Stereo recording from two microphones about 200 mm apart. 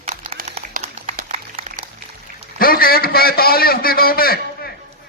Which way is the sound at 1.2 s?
30° right (ahead or behind).